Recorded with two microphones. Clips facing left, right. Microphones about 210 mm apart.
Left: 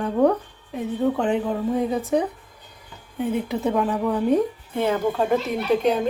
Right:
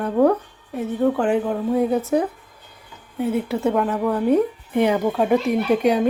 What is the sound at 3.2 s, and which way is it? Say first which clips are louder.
A woman's voice: right 2 dB; 5° right (ahead or behind).